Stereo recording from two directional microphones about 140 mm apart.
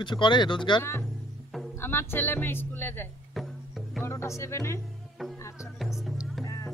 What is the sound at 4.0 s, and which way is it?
Speech, 20° left (ahead or behind).